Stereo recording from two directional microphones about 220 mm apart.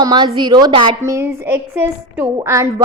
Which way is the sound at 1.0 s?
10° right (ahead or behind).